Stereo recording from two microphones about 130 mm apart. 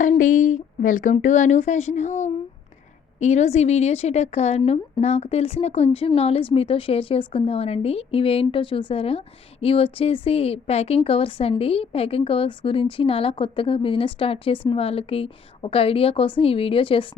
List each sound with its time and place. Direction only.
0.2 s speech: 80° left
1.1 s a woman's voice: 70° left (ahead or behind); by 17.1 s 45° left (ahead or behind)